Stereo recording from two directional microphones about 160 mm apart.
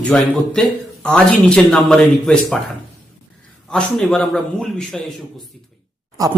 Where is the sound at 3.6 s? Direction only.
5° left (ahead or behind).